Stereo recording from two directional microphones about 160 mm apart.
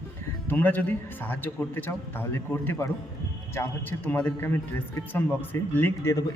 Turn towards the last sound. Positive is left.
turn(degrees=15)  # may be behind; listen again after turning